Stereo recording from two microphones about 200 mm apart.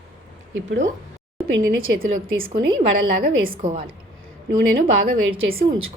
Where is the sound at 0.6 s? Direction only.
70° right (ahead or behind).